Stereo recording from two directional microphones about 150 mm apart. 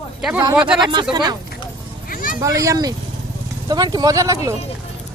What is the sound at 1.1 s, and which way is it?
Speech, 30° right (ahead or behind).